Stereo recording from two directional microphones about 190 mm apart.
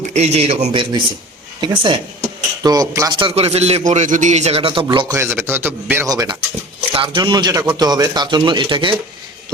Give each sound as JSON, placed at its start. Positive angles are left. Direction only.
{"t": 0.1, "sound": "a man's voice", "side_deg": -35}